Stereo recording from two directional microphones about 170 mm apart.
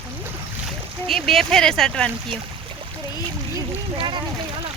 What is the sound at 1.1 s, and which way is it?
Speech, centre (ahead or behind).